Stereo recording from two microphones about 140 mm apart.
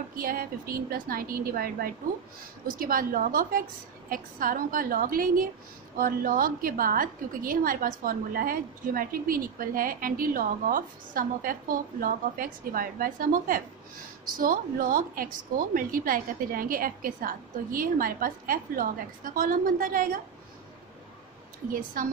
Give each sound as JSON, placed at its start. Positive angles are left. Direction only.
{"t": 0.1, "sound": "a woman's voice", "side_deg": -90}
{"t": 22.0, "sound": "a woman's voice", "side_deg": -80}